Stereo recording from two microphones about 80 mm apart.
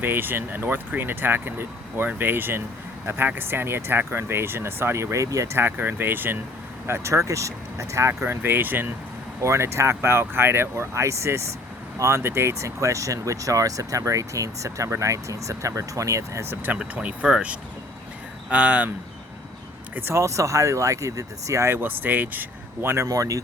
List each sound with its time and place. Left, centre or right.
0.0 s speech: right
5.5 s speech: right
9.4 s speech: right
16.7 s speech: centre
20.0 s speech: right
20.2 s speech: right
23.0 s speech: right